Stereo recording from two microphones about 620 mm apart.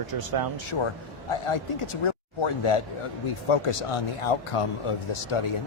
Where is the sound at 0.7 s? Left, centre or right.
Left.